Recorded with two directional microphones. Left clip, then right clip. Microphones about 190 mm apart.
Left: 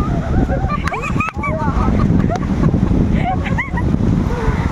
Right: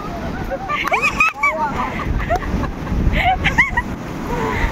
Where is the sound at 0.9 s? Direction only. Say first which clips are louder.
Right 5 dB; 5° left (ahead or behind).